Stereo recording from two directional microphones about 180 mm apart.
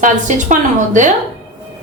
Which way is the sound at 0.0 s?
45° right (ahead or behind).